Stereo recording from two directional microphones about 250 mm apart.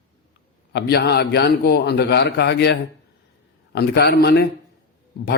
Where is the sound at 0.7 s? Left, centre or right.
Left.